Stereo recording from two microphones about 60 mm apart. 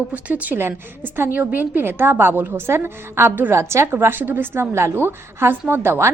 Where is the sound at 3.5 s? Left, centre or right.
Right.